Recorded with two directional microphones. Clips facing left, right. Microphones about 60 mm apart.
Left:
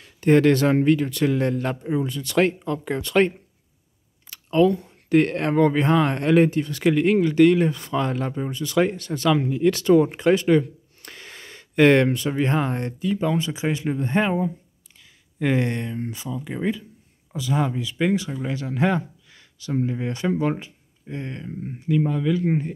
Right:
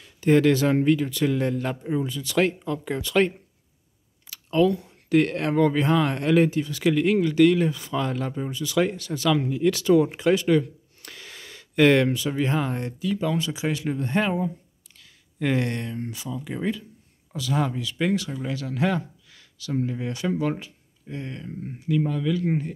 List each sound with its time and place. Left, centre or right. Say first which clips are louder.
0.0 s speech: left 2 dB; left
13.1 s speech: left 2 dB; left